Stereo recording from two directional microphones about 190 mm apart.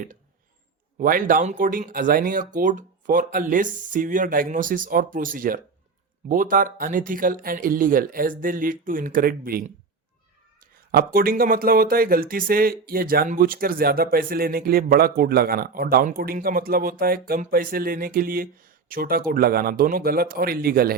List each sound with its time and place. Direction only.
0.9 s speech: 45° right (ahead or behind)